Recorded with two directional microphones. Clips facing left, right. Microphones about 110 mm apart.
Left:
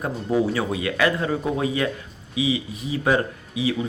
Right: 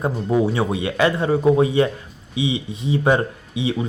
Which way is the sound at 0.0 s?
25° right (ahead or behind).